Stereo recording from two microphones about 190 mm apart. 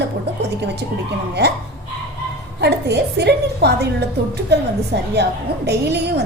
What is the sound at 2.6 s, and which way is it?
A woman's voice, 60° right (ahead or behind).